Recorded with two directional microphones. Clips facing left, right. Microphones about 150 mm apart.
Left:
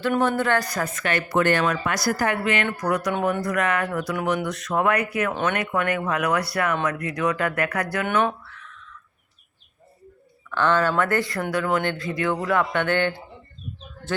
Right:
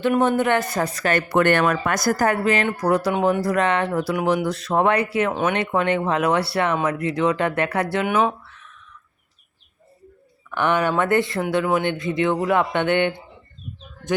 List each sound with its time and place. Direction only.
0.2 s speech: 20° right (ahead or behind); by 1.2 s 35° right (ahead or behind)
1.3 s speech: 60° right (ahead or behind); by 5.3 s 30° right (ahead or behind)
5.3 s speech: 10° right (ahead or behind)
5.5 s speech: 25° right (ahead or behind)
8.0 s speech: 5° right (ahead or behind)
8.4 s a sound: 20° right (ahead or behind)
10.5 s speech: 15° right (ahead or behind)